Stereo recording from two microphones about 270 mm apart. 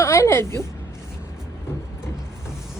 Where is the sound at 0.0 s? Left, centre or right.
Centre.